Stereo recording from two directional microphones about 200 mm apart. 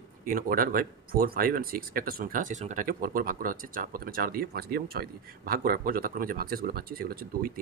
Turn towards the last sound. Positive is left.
turn(degrees=-45)  # may be behind; listen again after turning